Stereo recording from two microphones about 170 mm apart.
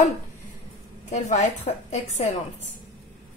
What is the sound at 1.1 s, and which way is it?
A woman's voice, 45° left (ahead or behind).